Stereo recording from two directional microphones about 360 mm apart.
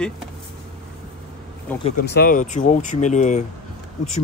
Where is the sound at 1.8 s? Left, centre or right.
Left.